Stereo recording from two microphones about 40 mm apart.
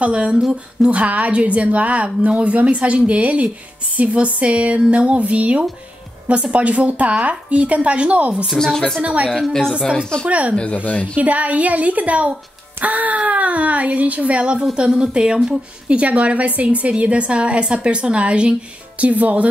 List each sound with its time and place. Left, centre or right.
0.0 s a woman's voice: right
8.5 s speech: centre
9.0 s a woman's voice: right
9.5 s speech: centre
10.2 s a woman's voice: right
10.5 s speech: left
11.1 s a woman's voice: right